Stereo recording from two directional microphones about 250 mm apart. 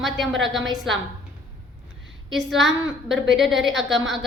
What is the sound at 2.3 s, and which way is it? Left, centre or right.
A woman's voice, centre.